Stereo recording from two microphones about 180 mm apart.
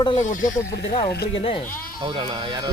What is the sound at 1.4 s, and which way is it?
Speech, 30° left (ahead or behind).